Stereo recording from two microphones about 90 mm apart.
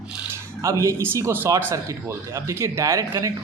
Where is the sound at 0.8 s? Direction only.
30° right (ahead or behind).